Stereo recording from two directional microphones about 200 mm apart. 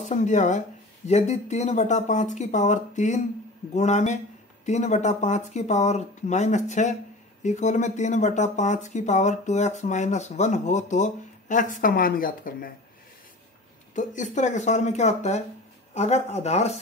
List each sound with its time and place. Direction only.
0.0 s speech: 35° left (ahead or behind)
13.9 s speech: 40° left (ahead or behind)